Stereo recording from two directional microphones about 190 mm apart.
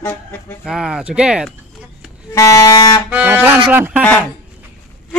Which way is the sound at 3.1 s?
10° right (ahead or behind).